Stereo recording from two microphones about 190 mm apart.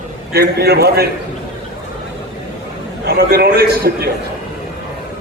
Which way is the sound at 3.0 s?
60° right (ahead or behind).